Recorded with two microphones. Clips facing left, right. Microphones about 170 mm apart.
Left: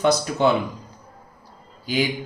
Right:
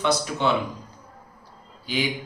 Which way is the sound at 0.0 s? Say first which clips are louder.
Left 4 dB; 40° left (ahead or behind).